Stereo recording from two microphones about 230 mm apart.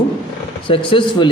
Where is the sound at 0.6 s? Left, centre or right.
Left.